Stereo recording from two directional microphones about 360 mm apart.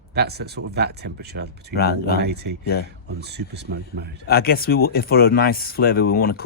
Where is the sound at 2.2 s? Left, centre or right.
Right.